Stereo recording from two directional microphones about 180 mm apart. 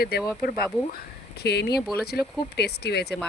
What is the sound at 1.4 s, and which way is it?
Speech, 65° left (ahead or behind).